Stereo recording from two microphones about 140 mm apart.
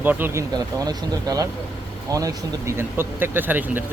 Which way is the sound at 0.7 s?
25° right (ahead or behind).